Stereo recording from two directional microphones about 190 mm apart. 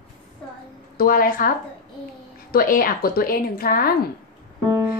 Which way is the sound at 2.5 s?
50° left (ahead or behind).